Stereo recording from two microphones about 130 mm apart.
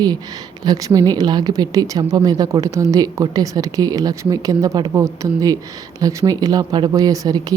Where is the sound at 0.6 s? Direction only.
30° right (ahead or behind).